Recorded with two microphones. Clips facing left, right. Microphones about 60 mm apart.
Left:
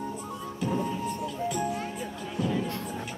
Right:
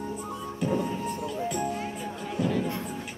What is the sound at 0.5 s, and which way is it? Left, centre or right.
Music, centre.